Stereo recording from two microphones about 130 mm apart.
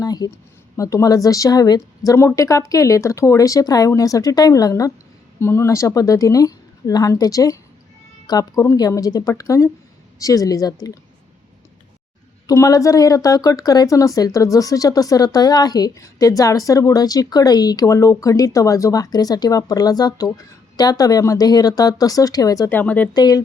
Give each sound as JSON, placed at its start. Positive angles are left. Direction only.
{"t": 0.0, "sound": "a sound", "side_deg": 30}
{"t": 0.8, "sound": "speech", "side_deg": 25}
{"t": 12.5, "sound": "speech", "side_deg": 25}
{"t": 22.7, "sound": "speech", "side_deg": 15}
{"t": 23.1, "sound": "speech", "side_deg": 30}